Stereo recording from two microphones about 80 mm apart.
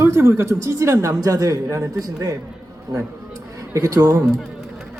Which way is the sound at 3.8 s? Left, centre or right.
Right.